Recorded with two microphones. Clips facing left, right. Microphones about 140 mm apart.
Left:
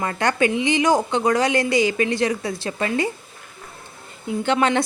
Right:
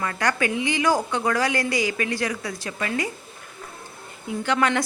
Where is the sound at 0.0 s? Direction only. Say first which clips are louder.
Left 4 dB; 25° left (ahead or behind).